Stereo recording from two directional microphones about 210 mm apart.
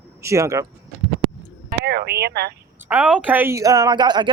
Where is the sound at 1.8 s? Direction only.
50° right (ahead or behind).